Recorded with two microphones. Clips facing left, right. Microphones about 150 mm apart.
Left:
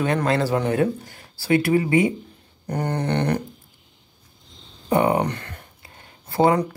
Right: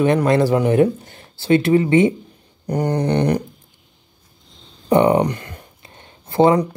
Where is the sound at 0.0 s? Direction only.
20° right (ahead or behind).